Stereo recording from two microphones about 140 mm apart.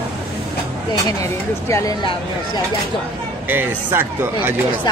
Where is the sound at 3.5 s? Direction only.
15° right (ahead or behind).